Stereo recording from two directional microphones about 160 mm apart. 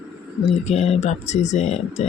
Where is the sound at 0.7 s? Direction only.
45° left (ahead or behind).